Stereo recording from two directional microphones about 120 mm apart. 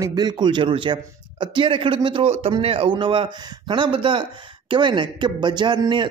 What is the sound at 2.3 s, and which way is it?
Speech, 55° right (ahead or behind).